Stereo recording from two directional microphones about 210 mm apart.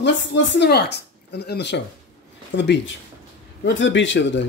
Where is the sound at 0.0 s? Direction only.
60° left (ahead or behind).